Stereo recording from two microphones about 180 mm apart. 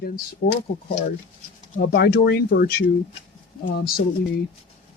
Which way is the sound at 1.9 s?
60° left (ahead or behind).